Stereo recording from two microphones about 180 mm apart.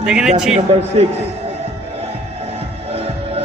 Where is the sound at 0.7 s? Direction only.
35° right (ahead or behind).